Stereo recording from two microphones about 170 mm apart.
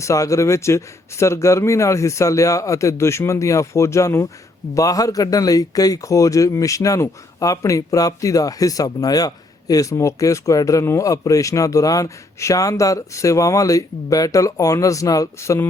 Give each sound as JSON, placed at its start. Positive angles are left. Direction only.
{"t": 0.0, "sound": "a man's voice", "side_deg": 20}